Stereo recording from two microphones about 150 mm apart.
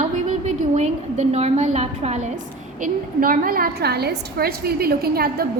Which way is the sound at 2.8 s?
75° right (ahead or behind).